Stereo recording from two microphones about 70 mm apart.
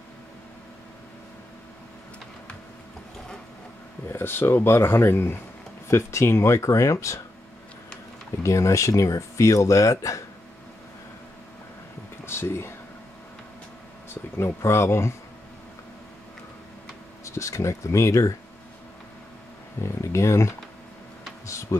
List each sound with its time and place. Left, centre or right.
4.1 s speech: left
8.4 s speech: left
12.3 s a sound: left
14.4 s speech: left
17.2 s speech: left
19.8 s insect: left
21.5 s a sound: left